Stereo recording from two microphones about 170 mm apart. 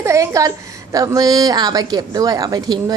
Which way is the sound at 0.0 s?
20° right (ahead or behind).